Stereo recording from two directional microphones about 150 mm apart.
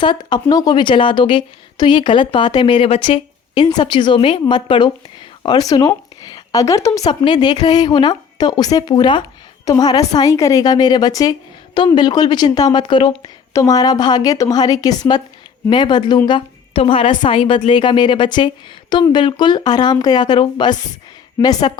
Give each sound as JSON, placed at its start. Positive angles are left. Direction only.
{"t": 0.0, "sound": "a woman's voice", "side_deg": 30}